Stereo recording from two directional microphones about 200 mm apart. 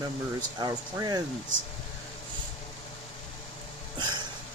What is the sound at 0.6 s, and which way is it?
Speech, 20° right (ahead or behind).